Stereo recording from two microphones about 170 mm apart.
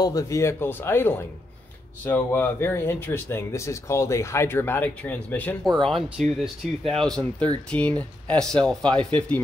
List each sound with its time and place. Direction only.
0.0 s speech: 20° left (ahead or behind)